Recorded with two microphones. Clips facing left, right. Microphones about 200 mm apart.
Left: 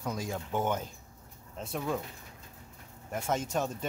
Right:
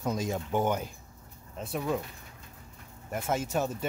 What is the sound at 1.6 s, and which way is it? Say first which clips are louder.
Speech: right 2 dB; centre (ahead or behind).